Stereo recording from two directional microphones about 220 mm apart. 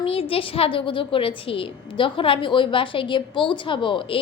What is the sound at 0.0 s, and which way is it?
A woman's voice, 25° left (ahead or behind).